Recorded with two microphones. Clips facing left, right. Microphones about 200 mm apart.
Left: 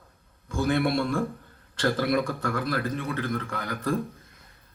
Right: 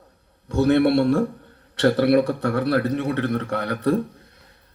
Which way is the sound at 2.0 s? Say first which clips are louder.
Right 8 dB; 65° right (ahead or behind).